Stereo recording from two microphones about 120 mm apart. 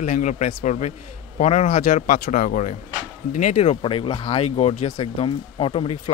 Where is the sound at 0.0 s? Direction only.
90° left.